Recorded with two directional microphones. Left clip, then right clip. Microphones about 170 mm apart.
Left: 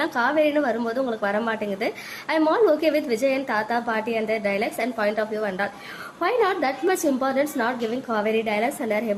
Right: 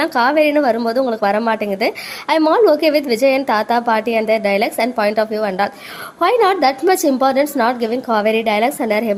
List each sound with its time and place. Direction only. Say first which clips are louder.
0.0 s a woman's voice: right 7 dB; 35° right (ahead or behind)